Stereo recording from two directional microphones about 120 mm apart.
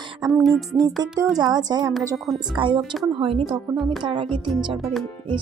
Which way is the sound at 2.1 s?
Centre (ahead or behind).